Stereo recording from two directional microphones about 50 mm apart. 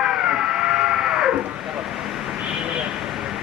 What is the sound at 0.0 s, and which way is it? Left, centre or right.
Cat, centre.